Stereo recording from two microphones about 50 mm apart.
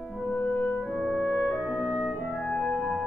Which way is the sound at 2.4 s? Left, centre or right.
Centre.